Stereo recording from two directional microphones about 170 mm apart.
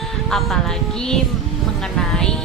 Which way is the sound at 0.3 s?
Centre (ahead or behind).